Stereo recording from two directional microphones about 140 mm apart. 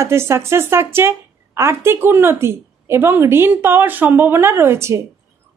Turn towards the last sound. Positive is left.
turn(degrees=-20)  # may be behind; listen again after turning